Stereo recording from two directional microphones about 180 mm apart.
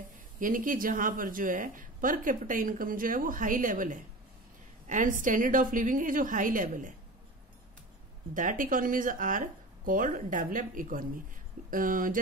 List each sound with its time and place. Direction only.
0.4 s a woman's voice: 50° right (ahead or behind)
8.4 s a woman's voice: 45° right (ahead or behind)